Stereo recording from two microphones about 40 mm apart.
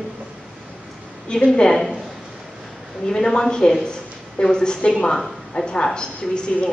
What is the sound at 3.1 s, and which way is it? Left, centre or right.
A woman's voice, centre.